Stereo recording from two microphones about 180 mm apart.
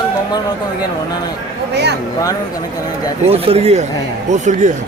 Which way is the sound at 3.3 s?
35° right (ahead or behind).